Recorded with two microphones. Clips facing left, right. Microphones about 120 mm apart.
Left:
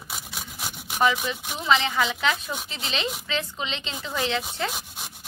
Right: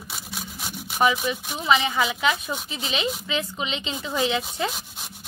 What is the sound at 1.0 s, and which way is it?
Speech, 10° right (ahead or behind).